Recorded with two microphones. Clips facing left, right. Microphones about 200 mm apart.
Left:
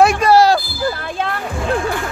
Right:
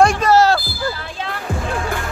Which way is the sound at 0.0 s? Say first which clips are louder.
Left 2 dB; 10° left (ahead or behind).